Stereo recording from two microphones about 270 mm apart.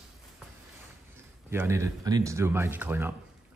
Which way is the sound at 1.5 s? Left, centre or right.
Centre.